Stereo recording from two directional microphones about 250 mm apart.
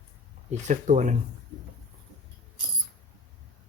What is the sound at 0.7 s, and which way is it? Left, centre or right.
Speech, right.